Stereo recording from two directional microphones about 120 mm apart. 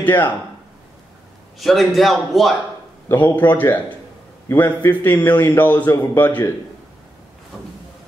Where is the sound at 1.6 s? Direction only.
Centre (ahead or behind).